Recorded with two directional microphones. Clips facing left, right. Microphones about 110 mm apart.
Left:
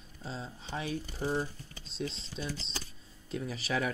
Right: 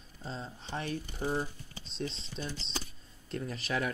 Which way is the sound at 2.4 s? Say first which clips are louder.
Even; centre (ahead or behind).